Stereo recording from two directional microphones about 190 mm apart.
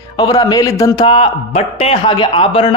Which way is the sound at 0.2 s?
20° left (ahead or behind).